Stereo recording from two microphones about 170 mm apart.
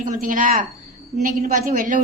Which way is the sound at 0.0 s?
50° right (ahead or behind).